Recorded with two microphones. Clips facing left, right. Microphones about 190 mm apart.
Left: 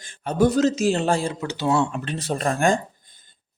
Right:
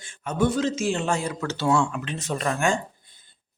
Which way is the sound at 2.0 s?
35° left (ahead or behind).